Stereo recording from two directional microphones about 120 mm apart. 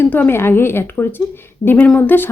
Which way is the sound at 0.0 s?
15° left (ahead or behind).